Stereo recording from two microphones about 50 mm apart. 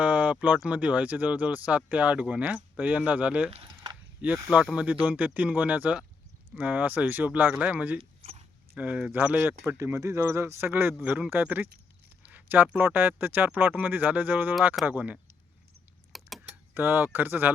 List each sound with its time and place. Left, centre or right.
0.0 s a sound: right
0.7 s speech: right
9.7 s speech: right
10.7 s speech: right
11.0 s speech: right
12.2 s a sound: right
12.8 s speech: right
16.1 s a sound: centre
16.7 s speech: right